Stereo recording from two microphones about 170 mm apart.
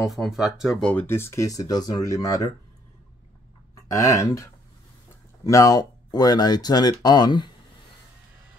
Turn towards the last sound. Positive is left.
turn(degrees=25)  # may be behind; listen again after turning